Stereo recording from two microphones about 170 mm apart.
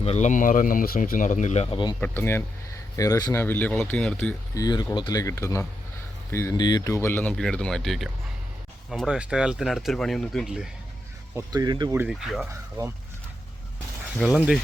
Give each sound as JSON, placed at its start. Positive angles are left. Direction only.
{"t": 0.0, "sound": "speech", "side_deg": 40}
{"t": 2.0, "sound": "speech", "side_deg": 15}
{"t": 4.5, "sound": "speech", "side_deg": 25}
{"t": 11.3, "sound": "speech", "side_deg": -25}
{"t": 11.9, "sound": "speech", "side_deg": -5}
{"t": 14.2, "sound": "speech", "side_deg": -5}